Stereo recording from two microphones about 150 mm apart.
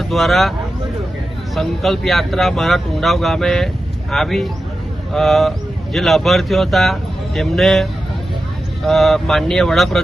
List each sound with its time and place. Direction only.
0.0 s speech: centre (ahead or behind)
1.5 s speech: centre (ahead or behind)